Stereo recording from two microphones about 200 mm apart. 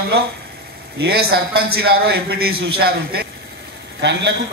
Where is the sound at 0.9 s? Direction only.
50° right (ahead or behind).